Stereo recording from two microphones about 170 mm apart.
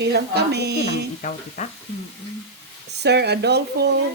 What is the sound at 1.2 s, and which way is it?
Speech, 45° left (ahead or behind).